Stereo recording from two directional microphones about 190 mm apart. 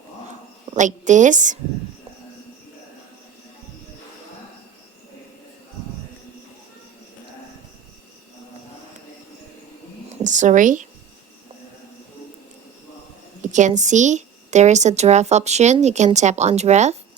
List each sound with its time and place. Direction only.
0.8 s a woman's voice: 40° right (ahead or behind)
10.2 s speech: 40° right (ahead or behind)
13.4 s a woman's voice: 40° right (ahead or behind)